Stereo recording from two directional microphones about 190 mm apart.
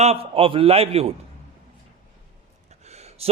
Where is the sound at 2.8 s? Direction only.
35° right (ahead or behind).